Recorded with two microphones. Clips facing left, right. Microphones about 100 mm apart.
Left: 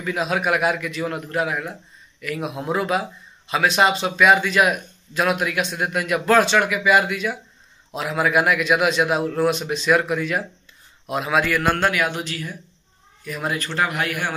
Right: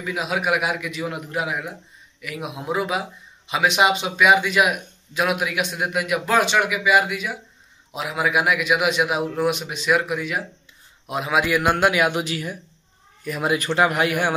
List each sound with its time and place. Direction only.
0.0 s speech: 10° right (ahead or behind)